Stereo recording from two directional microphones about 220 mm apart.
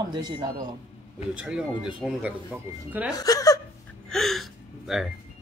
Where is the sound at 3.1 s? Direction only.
15° left (ahead or behind).